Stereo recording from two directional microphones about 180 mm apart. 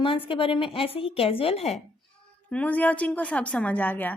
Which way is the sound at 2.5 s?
10° left (ahead or behind).